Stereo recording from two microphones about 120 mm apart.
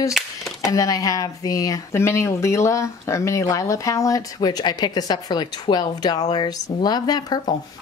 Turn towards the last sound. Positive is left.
turn(degrees=35)  # may be behind; listen again after turning